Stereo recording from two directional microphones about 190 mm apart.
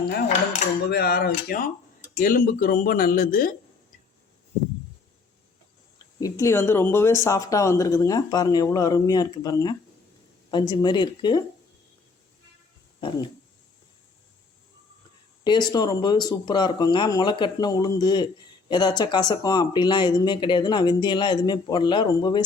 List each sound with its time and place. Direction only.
0.9 s speech: 55° left (ahead or behind)
6.1 s speech: 15° left (ahead or behind)
13.0 s speech: 25° left (ahead or behind)
15.4 s speech: 20° left (ahead or behind)